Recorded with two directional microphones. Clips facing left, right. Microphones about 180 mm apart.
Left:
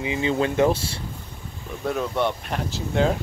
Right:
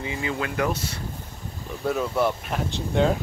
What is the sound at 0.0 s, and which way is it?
Speech, 20° left (ahead or behind).